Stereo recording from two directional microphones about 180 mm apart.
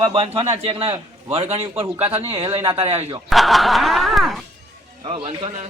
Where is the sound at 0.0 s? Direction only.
25° right (ahead or behind).